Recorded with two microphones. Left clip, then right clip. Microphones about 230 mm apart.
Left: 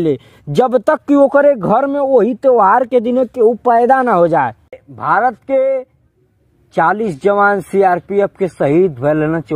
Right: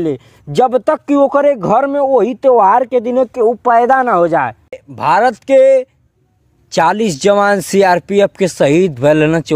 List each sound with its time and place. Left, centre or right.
0.0 s speech: left
2.9 s speech: left
4.9 s speech: right